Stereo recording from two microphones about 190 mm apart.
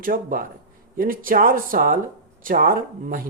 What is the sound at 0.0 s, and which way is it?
Speech, 45° right (ahead or behind).